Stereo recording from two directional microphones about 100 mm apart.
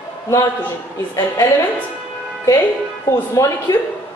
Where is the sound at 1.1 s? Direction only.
40° left (ahead or behind).